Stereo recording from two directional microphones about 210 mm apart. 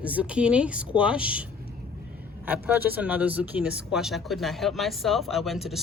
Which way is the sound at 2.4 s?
10° right (ahead or behind).